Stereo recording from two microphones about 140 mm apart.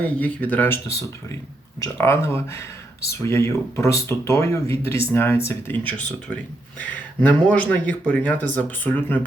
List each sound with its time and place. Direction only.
0.0 s speech: 10° left (ahead or behind)
1.8 s speech: 20° left (ahead or behind)